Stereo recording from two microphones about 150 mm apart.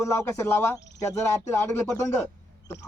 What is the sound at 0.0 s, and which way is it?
Speech, 15° left (ahead or behind).